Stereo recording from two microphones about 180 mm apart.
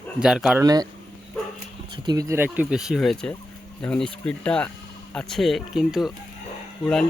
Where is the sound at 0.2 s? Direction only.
5° right (ahead or behind).